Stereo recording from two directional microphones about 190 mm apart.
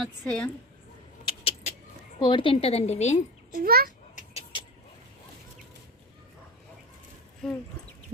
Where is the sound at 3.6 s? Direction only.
50° right (ahead or behind).